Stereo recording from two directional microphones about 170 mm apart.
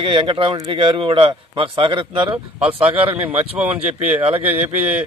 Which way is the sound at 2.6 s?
10° right (ahead or behind).